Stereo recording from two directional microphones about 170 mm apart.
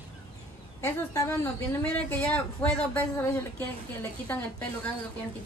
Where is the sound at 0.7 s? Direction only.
20° left (ahead or behind).